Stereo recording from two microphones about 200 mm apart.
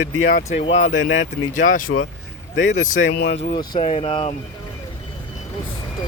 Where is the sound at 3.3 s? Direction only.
25° left (ahead or behind).